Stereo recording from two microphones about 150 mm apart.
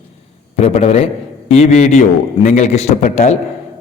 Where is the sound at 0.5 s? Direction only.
45° left (ahead or behind).